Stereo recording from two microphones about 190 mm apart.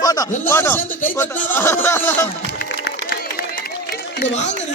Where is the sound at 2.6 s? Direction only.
55° left (ahead or behind).